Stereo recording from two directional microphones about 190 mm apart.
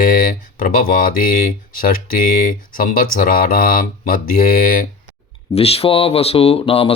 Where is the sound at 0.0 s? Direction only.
45° left (ahead or behind).